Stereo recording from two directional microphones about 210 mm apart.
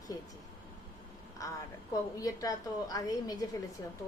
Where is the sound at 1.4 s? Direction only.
15° left (ahead or behind).